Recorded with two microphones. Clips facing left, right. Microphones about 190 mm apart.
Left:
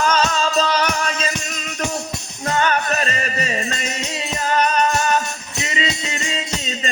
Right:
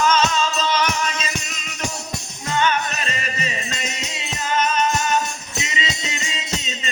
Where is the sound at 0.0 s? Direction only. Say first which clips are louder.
Even; 40° left (ahead or behind).